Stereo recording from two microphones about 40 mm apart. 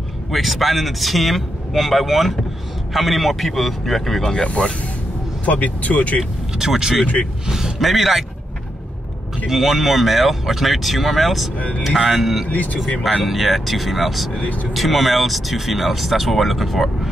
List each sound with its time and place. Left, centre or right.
0.3 s speech: centre
4.2 s speech: centre
4.5 s speech: left
5.4 s speech: left
6.5 s speech: centre
7.4 s a sound: centre
7.8 s speech: centre
9.5 s speech: centre
11.5 s speech: left
12.0 s speech: centre
12.4 s speech: left
13.2 s speech: centre